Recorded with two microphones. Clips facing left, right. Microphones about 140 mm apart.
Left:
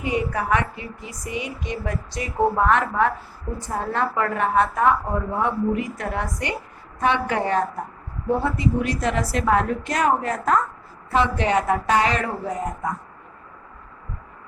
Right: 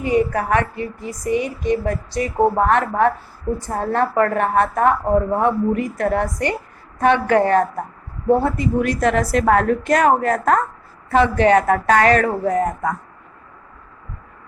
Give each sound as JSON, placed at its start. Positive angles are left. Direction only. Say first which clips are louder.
{"t": 0.0, "sound": "a woman's voice", "louder": "right 6 dB", "side_deg": -40}